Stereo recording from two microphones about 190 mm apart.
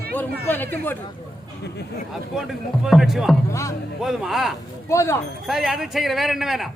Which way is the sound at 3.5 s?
15° left (ahead or behind).